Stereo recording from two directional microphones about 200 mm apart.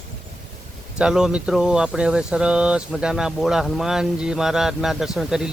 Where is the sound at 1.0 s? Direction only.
5° right (ahead or behind).